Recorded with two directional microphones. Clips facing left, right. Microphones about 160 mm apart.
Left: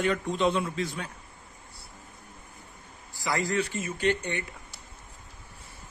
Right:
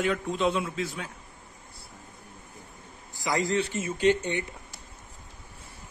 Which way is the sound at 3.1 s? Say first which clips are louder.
Right 1 dB; 20° right (ahead or behind).